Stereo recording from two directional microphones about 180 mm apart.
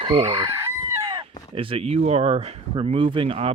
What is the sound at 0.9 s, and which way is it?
Chicken, 20° right (ahead or behind).